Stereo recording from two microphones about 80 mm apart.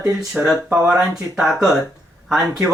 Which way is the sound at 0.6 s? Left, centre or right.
Right.